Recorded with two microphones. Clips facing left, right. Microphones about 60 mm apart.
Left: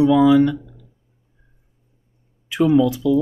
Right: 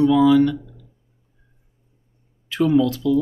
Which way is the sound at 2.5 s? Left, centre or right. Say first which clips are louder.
Left 2 dB; centre.